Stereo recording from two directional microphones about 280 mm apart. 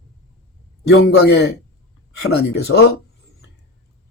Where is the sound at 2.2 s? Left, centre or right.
Left.